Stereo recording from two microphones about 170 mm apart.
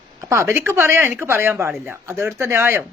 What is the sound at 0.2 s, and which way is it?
Speech, 15° right (ahead or behind).